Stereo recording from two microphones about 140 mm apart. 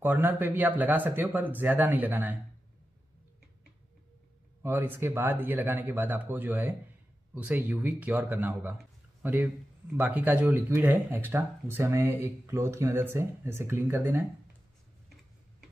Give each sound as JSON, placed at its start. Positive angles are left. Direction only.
{"t": 0.0, "sound": "speech", "side_deg": -15}
{"t": 4.6, "sound": "speech", "side_deg": -15}